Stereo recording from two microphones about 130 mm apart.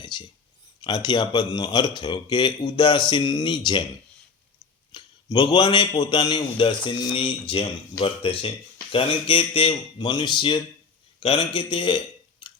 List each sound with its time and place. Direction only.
0.0 s a sound: 35° left (ahead or behind)
0.9 s a man's voice: 35° left (ahead or behind)
4.9 s a man's voice: 35° left (ahead or behind)